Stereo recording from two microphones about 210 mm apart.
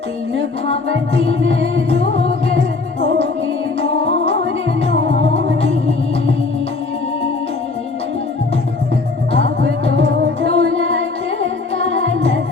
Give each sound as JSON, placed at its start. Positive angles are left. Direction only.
{"t": 0.7, "sound": "music", "side_deg": 30}
{"t": 1.3, "sound": "music", "side_deg": -65}
{"t": 1.7, "sound": "music", "side_deg": 30}
{"t": 2.6, "sound": "music", "side_deg": -60}
{"t": 4.9, "sound": "music", "side_deg": -60}
{"t": 10.5, "sound": "music", "side_deg": -65}
{"t": 11.3, "sound": "music", "side_deg": 30}